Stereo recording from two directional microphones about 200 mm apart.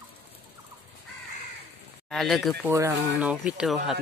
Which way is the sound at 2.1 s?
Centre (ahead or behind).